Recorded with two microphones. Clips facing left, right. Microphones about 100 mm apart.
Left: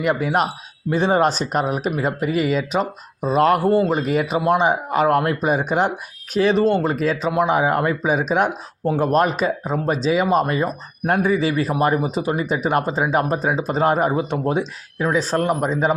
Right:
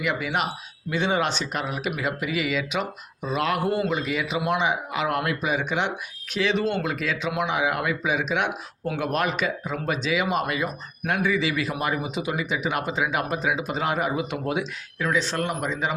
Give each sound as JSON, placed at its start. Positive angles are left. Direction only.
{"t": 0.0, "sound": "speech", "side_deg": 40}